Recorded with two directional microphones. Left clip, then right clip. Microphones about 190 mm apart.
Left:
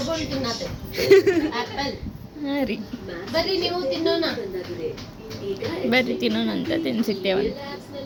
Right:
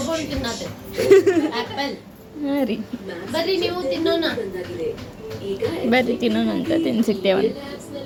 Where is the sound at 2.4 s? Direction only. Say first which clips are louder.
Right 3 dB; 10° right (ahead or behind).